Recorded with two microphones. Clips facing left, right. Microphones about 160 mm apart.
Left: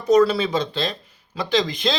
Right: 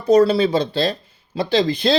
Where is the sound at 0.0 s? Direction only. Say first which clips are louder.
Right 3 dB; 30° right (ahead or behind).